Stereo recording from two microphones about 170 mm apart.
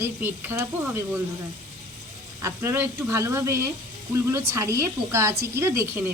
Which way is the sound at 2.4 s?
15° right (ahead or behind).